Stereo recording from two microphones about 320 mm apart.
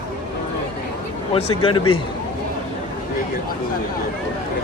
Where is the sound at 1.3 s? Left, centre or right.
Centre.